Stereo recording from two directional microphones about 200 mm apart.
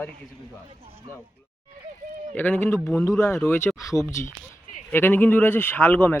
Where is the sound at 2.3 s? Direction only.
10° left (ahead or behind).